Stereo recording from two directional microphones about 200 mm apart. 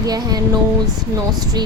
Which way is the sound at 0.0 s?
20° right (ahead or behind).